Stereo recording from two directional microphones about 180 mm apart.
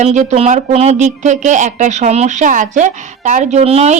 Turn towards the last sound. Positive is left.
turn(degrees=-35)  # may be behind; listen again after turning